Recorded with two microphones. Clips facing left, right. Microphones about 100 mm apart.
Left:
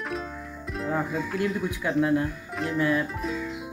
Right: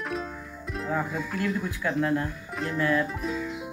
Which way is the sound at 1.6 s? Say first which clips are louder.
Left 2 dB; 20° left (ahead or behind).